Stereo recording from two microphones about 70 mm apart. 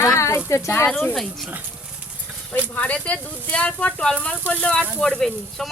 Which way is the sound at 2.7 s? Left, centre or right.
Left.